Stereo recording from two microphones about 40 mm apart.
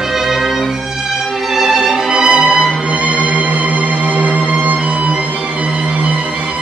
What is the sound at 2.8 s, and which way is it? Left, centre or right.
Music, right.